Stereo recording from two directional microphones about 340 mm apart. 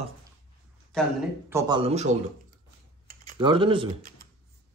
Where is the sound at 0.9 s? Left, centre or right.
Centre.